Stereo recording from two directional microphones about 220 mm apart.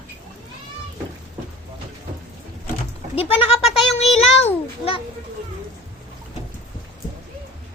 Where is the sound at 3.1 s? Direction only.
25° left (ahead or behind).